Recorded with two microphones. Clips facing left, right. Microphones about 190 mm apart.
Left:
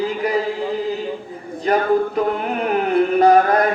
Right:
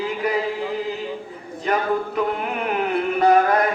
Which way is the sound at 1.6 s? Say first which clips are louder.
Left 5 dB; 40° left (ahead or behind).